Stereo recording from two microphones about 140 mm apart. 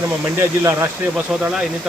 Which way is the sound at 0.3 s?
20° right (ahead or behind).